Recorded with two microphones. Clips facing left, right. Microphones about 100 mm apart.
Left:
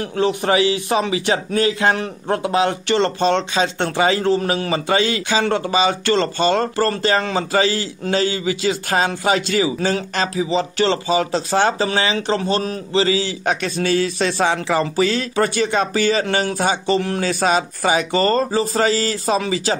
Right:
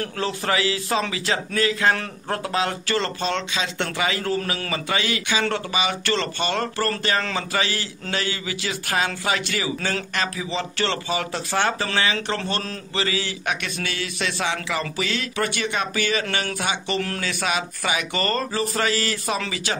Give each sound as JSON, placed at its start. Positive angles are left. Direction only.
{"t": 0.0, "sound": "a man's voice", "side_deg": 20}